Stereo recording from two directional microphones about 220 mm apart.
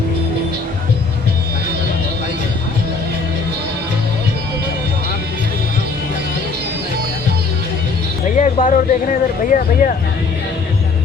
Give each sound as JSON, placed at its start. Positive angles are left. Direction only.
{"t": 8.4, "sound": "speech", "side_deg": 35}